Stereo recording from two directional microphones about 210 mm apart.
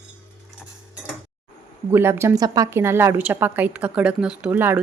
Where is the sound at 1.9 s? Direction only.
10° right (ahead or behind).